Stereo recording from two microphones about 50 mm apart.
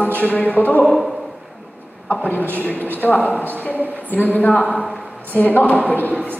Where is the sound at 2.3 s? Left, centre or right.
Left.